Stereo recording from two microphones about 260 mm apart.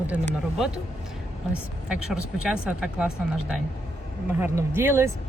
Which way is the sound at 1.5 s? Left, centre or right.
Centre.